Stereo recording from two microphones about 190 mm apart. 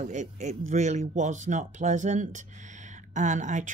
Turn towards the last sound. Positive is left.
turn(degrees=-40)  # may be behind; listen again after turning